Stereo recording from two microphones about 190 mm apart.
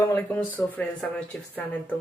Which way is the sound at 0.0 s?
10° left (ahead or behind).